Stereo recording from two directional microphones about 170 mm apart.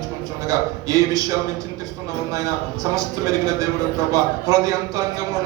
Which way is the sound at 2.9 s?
20° right (ahead or behind).